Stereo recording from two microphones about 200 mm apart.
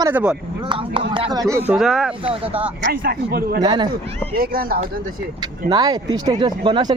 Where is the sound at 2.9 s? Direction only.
50° right (ahead or behind).